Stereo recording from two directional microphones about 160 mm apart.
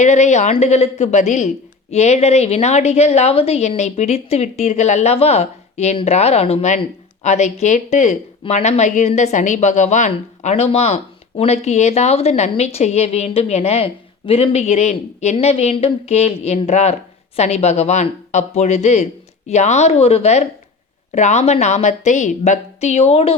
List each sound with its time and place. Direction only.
0.0 s a woman's voice: 45° left (ahead or behind)